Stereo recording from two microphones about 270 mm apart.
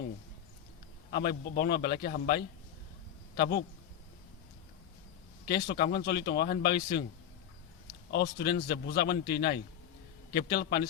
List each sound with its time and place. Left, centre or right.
1.1 s speech: left
5.5 s speech: left
8.1 s speech: left